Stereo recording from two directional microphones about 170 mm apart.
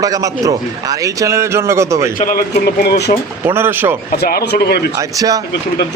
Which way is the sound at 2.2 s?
55° left (ahead or behind).